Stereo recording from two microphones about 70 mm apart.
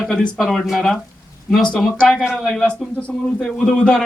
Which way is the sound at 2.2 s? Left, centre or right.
Centre.